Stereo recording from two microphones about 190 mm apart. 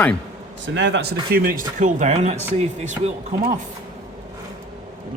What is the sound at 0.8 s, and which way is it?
Speech, 70° right (ahead or behind).